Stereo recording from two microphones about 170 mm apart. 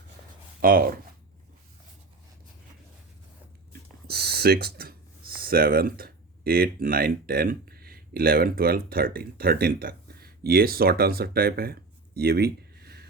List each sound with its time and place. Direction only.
0.6 s speech: 55° right (ahead or behind)
3.7 s a sound: 70° right (ahead or behind)
5.4 s speech: 60° right (ahead or behind)